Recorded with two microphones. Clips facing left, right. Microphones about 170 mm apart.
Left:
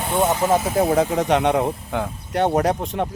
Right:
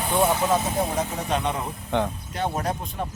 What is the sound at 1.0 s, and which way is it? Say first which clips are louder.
Speech: left 8 dB; 85° left.